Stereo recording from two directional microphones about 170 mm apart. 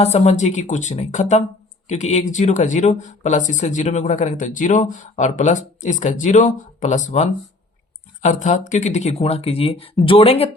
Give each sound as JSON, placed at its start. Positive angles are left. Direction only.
{"t": 0.0, "sound": "speech", "side_deg": 40}